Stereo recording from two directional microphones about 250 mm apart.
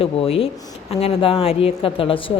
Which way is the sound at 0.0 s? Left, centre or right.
Left.